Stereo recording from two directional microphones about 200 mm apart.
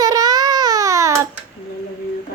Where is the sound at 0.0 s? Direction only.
20° right (ahead or behind).